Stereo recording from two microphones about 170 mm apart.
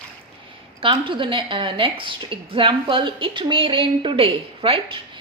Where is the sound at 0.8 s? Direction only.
30° right (ahead or behind).